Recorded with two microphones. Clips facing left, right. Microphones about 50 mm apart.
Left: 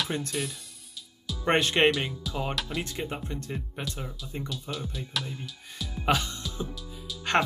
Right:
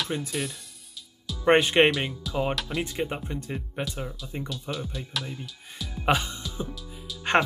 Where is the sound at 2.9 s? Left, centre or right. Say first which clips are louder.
Right 3 dB; centre.